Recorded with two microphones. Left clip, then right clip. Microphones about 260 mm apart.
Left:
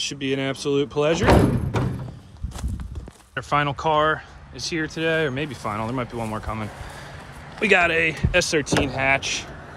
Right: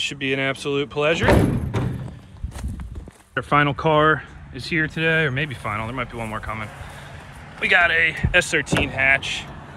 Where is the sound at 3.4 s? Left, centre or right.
Centre.